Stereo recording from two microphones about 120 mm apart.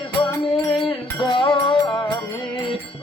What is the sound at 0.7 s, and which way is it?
Music, 45° left (ahead or behind).